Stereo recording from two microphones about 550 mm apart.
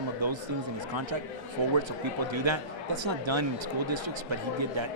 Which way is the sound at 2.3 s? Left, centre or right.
Right.